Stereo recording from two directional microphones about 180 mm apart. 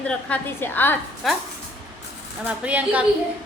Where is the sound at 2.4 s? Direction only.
10° right (ahead or behind).